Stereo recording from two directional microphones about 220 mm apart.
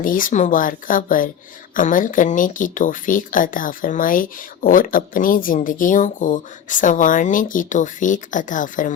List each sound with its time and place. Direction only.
0.0 s speech: 40° left (ahead or behind)